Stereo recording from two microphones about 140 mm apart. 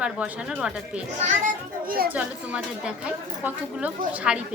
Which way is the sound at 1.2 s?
75° right (ahead or behind).